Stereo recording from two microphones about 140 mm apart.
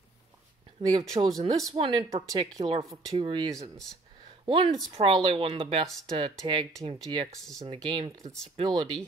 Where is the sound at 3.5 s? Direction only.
25° right (ahead or behind).